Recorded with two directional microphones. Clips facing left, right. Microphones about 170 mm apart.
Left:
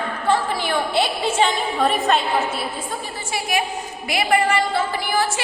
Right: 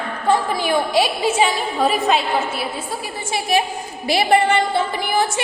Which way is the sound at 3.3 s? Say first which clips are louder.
Right 4 dB; 30° right (ahead or behind).